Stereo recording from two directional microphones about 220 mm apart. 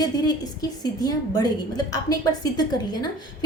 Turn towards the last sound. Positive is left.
turn(degrees=20)  # may be behind; listen again after turning